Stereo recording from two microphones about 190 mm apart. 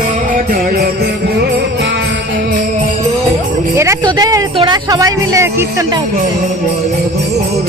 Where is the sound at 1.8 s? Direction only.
65° right (ahead or behind).